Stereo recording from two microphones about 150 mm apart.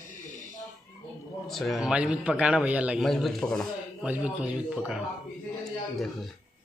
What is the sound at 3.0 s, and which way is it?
Speech, 5° left (ahead or behind).